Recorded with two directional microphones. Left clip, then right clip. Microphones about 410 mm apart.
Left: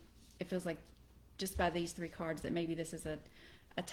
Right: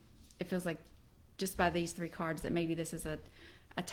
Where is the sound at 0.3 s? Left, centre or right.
Right.